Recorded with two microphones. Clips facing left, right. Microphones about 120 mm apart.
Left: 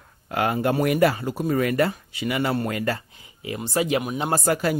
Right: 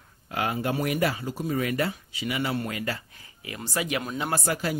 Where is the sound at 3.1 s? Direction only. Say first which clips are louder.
Left 7 dB; 25° left (ahead or behind).